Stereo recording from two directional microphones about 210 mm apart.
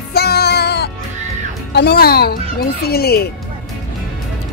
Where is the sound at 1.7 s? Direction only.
50° left (ahead or behind).